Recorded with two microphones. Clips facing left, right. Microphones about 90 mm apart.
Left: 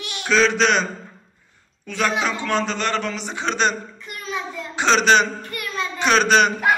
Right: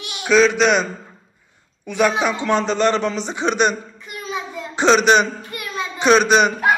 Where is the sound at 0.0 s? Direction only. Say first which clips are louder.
Right 1 dB; 20° right (ahead or behind).